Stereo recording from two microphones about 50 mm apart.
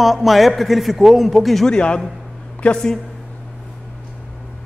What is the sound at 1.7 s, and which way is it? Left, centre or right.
A man's voice, left.